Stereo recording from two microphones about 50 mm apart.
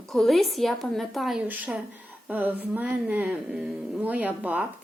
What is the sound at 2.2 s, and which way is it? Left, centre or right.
Speech, right.